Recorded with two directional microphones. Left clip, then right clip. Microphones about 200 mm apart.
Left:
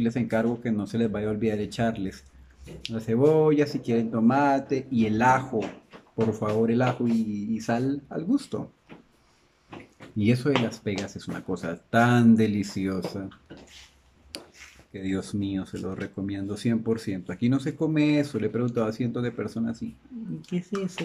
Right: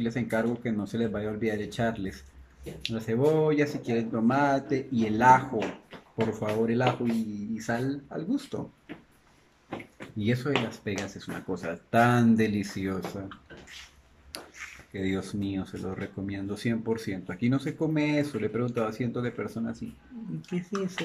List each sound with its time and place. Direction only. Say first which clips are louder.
0.0 s speech: left 3 dB; 5° left (ahead or behind)
10.1 s speech: left 4 dB; 10° left (ahead or behind)
14.9 s speech: left 1 dB; 5° left (ahead or behind)